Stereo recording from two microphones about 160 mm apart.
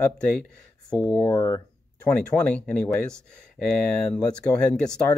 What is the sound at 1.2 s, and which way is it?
Speech, 20° left (ahead or behind).